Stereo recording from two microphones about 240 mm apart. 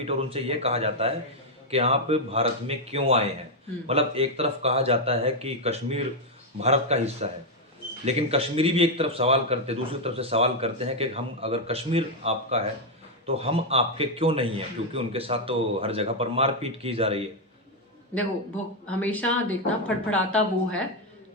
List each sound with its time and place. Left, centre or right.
0.0 s speech: right
18.9 s a woman's voice: centre